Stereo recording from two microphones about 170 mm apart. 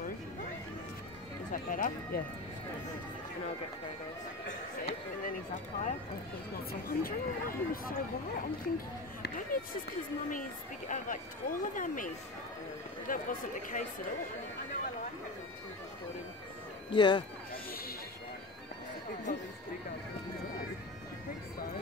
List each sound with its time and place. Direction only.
1.5 s speech: 50° left (ahead or behind)
4.5 s speech: 50° left (ahead or behind)
6.7 s speech: 60° left (ahead or behind)
10.9 s speech: 50° left (ahead or behind)
13.1 s speech: 55° left (ahead or behind)
16.9 s speech: 30° left (ahead or behind)
19.3 s speech: 50° left (ahead or behind)